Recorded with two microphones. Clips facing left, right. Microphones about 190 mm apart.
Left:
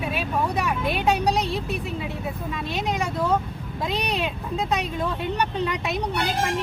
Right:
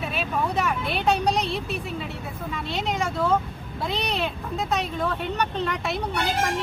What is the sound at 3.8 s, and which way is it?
Speech, 15° left (ahead or behind).